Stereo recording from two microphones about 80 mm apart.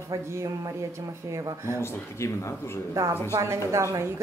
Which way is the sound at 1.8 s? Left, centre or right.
Left.